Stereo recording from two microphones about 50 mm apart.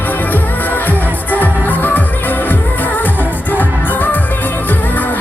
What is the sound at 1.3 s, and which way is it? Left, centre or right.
Music, left.